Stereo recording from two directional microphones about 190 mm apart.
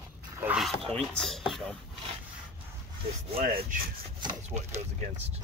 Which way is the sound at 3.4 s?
50° right (ahead or behind).